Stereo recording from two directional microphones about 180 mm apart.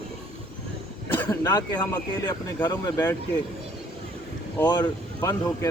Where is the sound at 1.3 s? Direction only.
20° left (ahead or behind).